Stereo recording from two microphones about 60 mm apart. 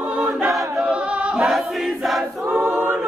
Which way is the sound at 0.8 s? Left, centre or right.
Centre.